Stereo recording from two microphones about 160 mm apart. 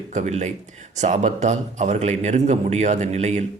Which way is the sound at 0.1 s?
45° right (ahead or behind).